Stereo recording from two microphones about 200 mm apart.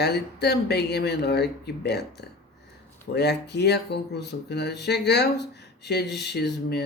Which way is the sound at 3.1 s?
55° left (ahead or behind).